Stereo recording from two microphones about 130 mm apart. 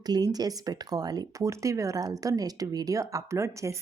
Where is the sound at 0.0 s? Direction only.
30° right (ahead or behind).